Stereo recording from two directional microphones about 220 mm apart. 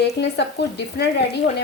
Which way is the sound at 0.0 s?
50° left (ahead or behind).